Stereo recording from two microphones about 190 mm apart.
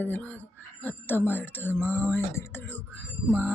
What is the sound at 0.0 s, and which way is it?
Speech, 10° left (ahead or behind).